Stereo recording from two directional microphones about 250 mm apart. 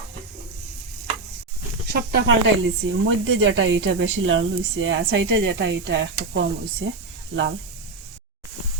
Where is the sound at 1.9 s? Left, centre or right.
Right.